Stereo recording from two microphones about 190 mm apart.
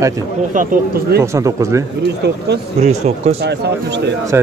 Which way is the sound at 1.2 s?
15° right (ahead or behind).